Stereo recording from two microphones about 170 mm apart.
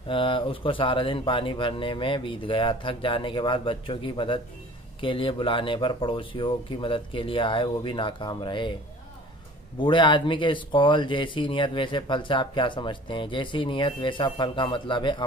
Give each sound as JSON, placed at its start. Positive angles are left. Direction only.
{"t": 0.1, "sound": "speech", "side_deg": 30}
{"t": 9.8, "sound": "speech", "side_deg": 30}